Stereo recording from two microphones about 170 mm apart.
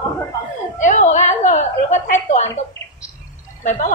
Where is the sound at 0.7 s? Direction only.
45° left (ahead or behind).